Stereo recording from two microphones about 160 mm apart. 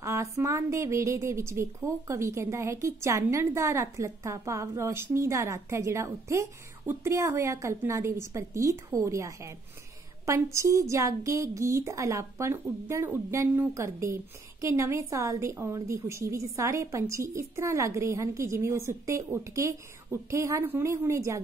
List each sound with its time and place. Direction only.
0.0 s a woman's voice: 20° right (ahead or behind)